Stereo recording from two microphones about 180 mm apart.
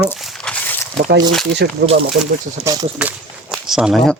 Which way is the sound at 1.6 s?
65° right (ahead or behind).